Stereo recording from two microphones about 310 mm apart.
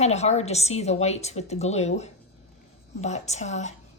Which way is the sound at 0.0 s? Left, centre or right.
Left.